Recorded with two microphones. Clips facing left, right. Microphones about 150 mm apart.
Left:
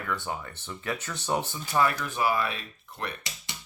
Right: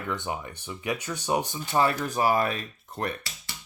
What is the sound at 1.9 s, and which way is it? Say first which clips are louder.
Speech: right 3 dB; 40° right (ahead or behind).